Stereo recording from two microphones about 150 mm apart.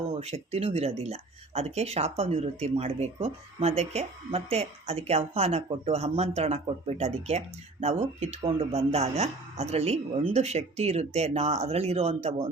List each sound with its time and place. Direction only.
0.1 s speech: 45° right (ahead or behind)